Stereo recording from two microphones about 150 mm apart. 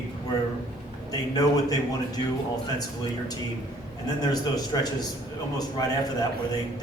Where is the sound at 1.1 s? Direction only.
25° left (ahead or behind).